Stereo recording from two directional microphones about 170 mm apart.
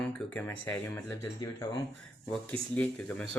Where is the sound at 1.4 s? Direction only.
20° left (ahead or behind).